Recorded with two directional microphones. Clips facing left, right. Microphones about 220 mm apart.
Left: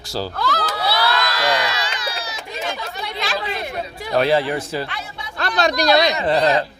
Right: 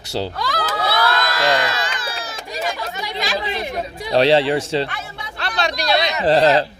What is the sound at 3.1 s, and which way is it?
Chatter, 15° right (ahead or behind).